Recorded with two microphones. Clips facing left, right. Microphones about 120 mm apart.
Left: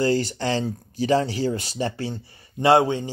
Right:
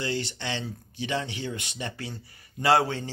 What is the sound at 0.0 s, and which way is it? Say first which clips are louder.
Speech: left 9 dB; 40° left (ahead or behind).